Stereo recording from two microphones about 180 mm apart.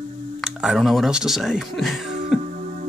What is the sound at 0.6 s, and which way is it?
Speech, centre (ahead or behind).